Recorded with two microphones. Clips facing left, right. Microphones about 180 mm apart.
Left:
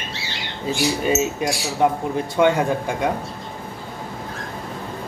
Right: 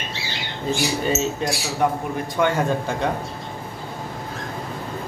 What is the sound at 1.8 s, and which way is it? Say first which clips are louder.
A man's voice: left 3 dB; 20° left (ahead or behind).